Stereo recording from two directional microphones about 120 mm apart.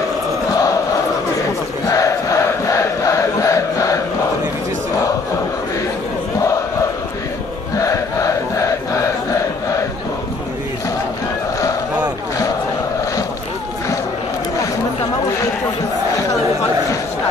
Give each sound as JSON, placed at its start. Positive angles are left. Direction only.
{"t": 0.5, "sound": "chant", "side_deg": 30}
{"t": 1.9, "sound": "crowd", "side_deg": 30}
{"t": 7.7, "sound": "crowd", "side_deg": 30}